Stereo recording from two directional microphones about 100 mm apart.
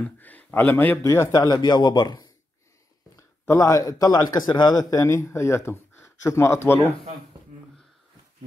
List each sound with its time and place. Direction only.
0.0 s speech: 15° left (ahead or behind)
1.3 s a man's voice: 40° left (ahead or behind)
3.2 s a man's voice: 30° left (ahead or behind)